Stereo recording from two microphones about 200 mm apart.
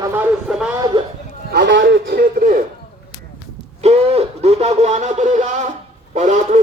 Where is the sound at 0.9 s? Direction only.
25° right (ahead or behind).